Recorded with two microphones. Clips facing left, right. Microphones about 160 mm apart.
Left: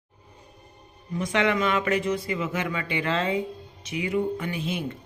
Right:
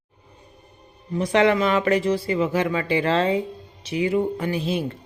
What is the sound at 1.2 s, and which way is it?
Speech, 35° right (ahead or behind).